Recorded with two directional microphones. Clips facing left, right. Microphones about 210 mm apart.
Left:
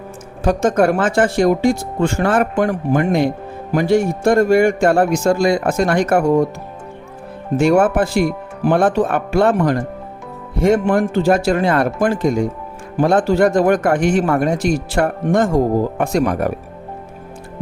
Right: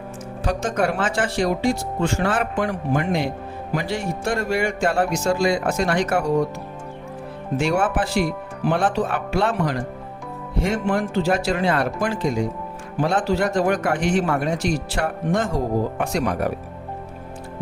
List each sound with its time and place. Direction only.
0.4 s a man's voice: 50° left (ahead or behind)
7.5 s a man's voice: 45° left (ahead or behind)